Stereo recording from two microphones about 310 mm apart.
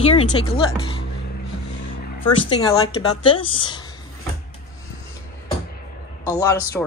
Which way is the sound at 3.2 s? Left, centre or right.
Centre.